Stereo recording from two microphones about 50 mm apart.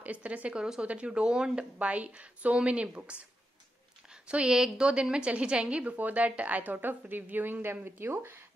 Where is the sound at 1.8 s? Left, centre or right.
Right.